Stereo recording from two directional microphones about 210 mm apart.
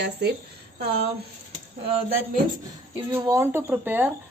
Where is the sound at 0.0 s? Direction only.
50° right (ahead or behind).